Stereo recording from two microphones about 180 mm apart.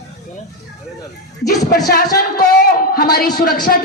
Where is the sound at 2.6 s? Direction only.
60° left (ahead or behind).